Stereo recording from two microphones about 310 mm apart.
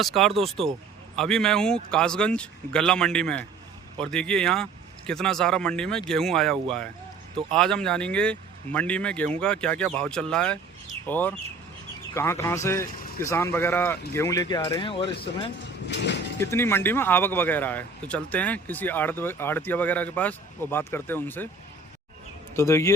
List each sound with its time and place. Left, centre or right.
0.0 s speech: centre
22.5 s speech: centre